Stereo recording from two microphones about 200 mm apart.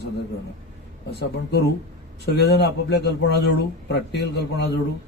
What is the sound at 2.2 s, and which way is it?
A man's voice, 55° left (ahead or behind).